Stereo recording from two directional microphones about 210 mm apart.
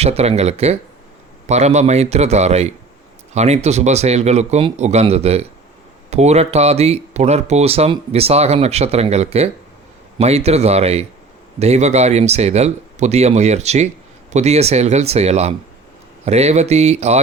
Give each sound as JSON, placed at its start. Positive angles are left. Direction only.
{"t": 0.0, "sound": "speech", "side_deg": -30}